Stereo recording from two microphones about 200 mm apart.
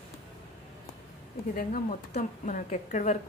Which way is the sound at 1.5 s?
40° left (ahead or behind).